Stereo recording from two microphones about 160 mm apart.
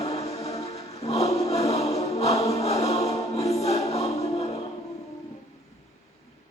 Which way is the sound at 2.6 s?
40° left (ahead or behind).